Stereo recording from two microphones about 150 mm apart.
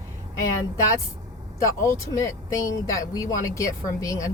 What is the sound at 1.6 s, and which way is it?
Speech, 20° left (ahead or behind).